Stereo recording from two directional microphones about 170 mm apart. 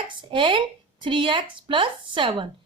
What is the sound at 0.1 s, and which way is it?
A woman's voice, 30° right (ahead or behind).